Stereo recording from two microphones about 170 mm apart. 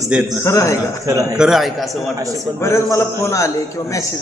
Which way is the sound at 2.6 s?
15° left (ahead or behind).